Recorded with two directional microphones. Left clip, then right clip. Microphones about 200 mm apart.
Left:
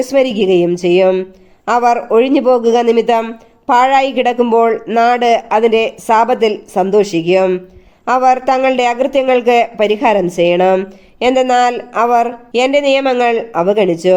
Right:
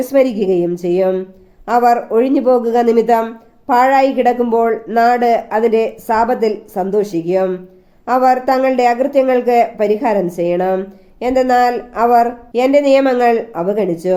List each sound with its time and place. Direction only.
0.0 s speech: 30° left (ahead or behind)